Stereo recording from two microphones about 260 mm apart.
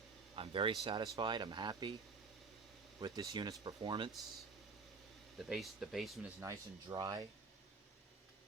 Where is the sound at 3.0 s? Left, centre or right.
Centre.